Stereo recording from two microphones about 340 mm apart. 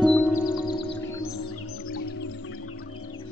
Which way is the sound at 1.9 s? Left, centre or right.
Left.